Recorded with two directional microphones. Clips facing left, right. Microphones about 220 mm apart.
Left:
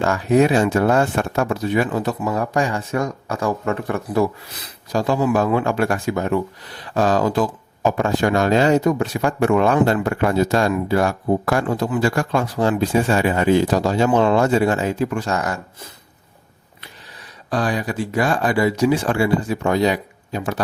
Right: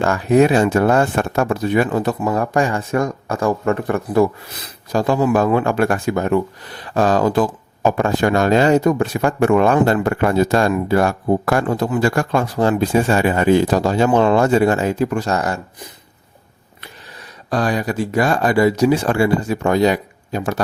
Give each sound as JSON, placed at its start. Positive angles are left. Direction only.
{"t": 0.0, "sound": "speech", "side_deg": -50}
{"t": 17.5, "sound": "speech", "side_deg": -45}